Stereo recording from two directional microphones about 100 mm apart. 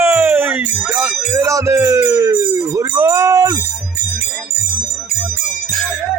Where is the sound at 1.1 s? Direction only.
10° right (ahead or behind).